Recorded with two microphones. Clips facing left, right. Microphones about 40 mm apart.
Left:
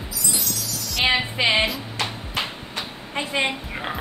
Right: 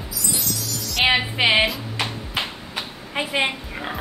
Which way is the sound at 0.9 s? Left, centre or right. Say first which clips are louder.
Right 2 dB; centre.